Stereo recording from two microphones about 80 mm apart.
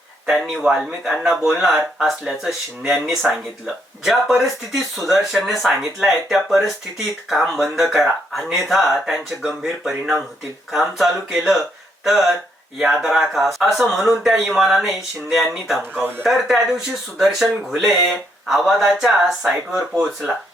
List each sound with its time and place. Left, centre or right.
0.3 s speech: centre
12.8 s speech: centre
15.8 s speech: right
16.2 s speech: centre